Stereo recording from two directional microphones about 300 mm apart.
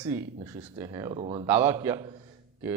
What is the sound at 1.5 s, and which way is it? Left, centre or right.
Speech, centre.